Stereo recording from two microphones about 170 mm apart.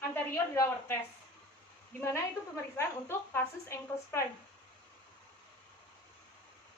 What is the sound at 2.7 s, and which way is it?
A woman's voice, 15° left (ahead or behind).